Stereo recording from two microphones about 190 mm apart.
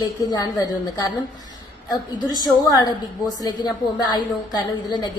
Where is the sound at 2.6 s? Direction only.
20° left (ahead or behind).